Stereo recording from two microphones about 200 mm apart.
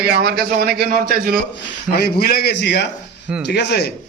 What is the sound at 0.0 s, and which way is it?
A man's voice, 55° right (ahead or behind).